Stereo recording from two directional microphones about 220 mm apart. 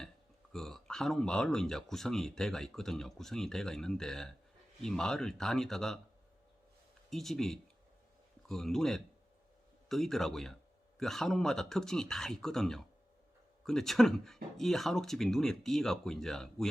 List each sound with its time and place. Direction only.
0.5 s speech: centre (ahead or behind)
7.1 s speech: centre (ahead or behind)